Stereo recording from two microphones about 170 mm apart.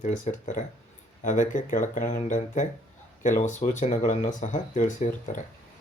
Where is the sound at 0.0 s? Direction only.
45° left (ahead or behind).